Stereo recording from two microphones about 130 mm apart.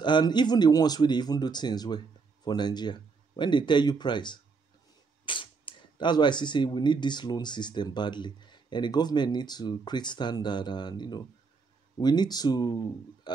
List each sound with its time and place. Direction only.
0.0 s speech: 35° left (ahead or behind)